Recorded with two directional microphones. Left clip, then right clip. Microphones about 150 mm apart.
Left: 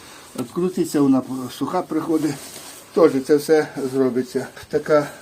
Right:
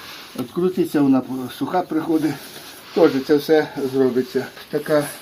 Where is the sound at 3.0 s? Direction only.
30° left (ahead or behind).